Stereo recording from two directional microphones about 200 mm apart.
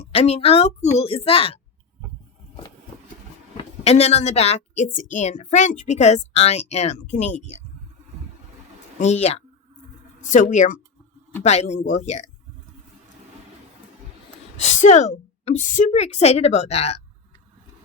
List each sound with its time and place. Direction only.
0.0 s a woman's voice: 30° left (ahead or behind)
3.6 s a woman's voice: 30° left (ahead or behind)
9.0 s a woman's voice: 35° left (ahead or behind)
14.5 s a woman's voice: 35° left (ahead or behind)